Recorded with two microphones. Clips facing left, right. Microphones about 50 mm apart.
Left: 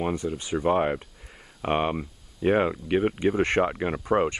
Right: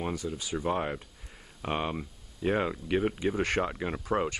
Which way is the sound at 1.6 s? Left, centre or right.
Left.